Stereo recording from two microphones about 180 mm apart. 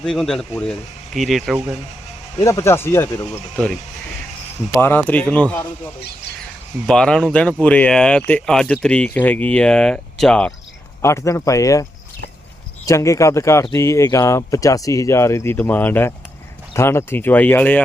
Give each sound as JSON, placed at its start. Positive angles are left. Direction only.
{"t": 0.0, "sound": "speech", "side_deg": 5}
{"t": 2.4, "sound": "speech", "side_deg": 15}
{"t": 4.8, "sound": "speech", "side_deg": 10}
{"t": 6.8, "sound": "speech", "side_deg": 5}
{"t": 11.0, "sound": "speech", "side_deg": 15}